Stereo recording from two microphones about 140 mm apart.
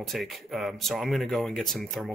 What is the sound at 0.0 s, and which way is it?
Speech, centre (ahead or behind).